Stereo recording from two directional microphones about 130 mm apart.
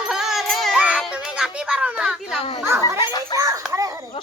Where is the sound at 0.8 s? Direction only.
10° right (ahead or behind).